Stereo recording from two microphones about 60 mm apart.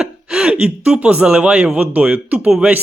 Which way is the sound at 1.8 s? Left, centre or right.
Centre.